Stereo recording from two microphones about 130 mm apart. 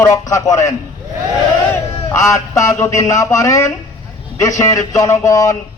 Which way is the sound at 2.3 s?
25° left (ahead or behind).